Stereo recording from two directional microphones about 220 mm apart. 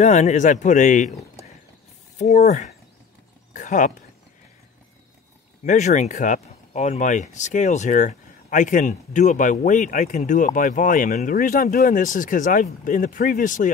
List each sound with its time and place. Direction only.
0.0 s speech: 35° left (ahead or behind)
5.6 s speech: 30° left (ahead or behind)